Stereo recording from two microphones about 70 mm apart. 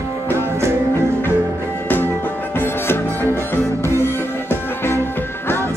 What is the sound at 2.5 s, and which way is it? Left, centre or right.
Music, left.